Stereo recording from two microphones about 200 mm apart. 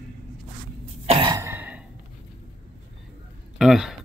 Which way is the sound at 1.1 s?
20° right (ahead or behind).